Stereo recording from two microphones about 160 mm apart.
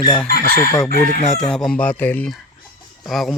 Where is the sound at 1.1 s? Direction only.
45° left (ahead or behind).